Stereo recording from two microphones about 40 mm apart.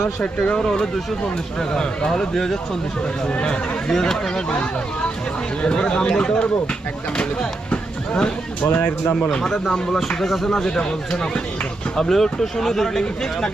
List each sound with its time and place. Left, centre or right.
0.5 s speech: centre
3.2 s speech: left
3.8 s speech: centre
7.7 s a sound: left
8.6 s speech: left
9.3 s speech: centre
10.2 s speech: centre
10.5 s speech: centre